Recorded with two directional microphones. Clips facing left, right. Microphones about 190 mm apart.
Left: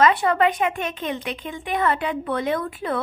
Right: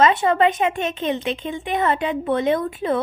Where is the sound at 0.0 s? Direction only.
25° right (ahead or behind).